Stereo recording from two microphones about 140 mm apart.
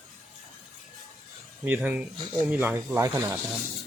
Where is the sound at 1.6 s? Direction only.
15° right (ahead or behind).